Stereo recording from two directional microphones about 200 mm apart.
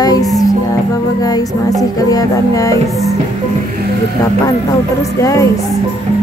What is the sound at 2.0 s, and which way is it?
Music, 15° left (ahead or behind).